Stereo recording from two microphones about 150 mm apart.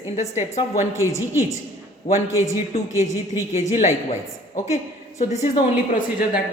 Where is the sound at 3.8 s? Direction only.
50° left (ahead or behind).